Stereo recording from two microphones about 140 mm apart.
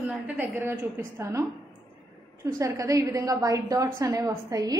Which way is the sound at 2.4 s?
25° right (ahead or behind).